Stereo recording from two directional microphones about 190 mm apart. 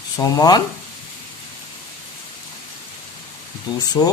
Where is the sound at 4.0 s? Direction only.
20° left (ahead or behind).